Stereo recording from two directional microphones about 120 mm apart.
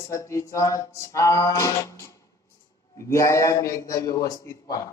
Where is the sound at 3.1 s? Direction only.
25° left (ahead or behind).